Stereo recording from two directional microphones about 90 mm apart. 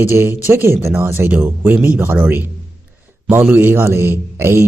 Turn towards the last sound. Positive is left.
turn(degrees=-25)  # may be behind; listen again after turning